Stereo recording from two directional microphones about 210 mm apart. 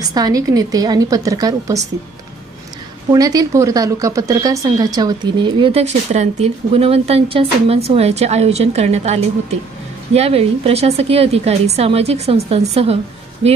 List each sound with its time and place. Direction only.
0.0 s speech: 20° right (ahead or behind)
3.1 s a woman's voice: 15° right (ahead or behind)